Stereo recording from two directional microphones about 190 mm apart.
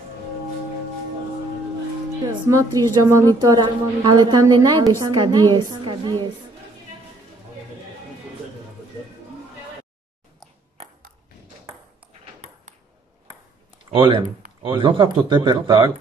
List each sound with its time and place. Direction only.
2.4 s a woman's voice: 15° right (ahead or behind)
13.8 s a woman's voice: 25° right (ahead or behind)